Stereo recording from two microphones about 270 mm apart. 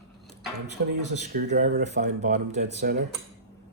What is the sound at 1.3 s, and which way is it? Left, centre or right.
Speech, right.